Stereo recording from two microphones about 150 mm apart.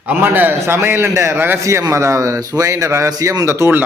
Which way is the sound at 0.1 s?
10° right (ahead or behind).